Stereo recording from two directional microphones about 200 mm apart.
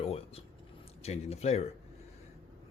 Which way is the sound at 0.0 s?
30° left (ahead or behind).